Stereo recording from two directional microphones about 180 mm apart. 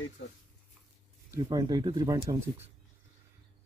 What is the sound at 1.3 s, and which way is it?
Speech, 20° right (ahead or behind).